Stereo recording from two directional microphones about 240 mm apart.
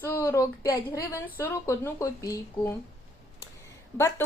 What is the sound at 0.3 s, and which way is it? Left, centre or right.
Speech, centre.